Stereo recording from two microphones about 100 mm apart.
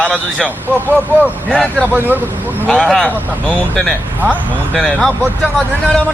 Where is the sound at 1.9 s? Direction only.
20° right (ahead or behind).